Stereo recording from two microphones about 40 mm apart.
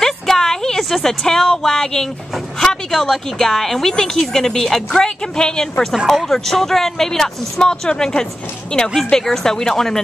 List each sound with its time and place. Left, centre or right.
0.0 s a sound: centre
1.2 s speech: centre
6.0 s a woman's voice: centre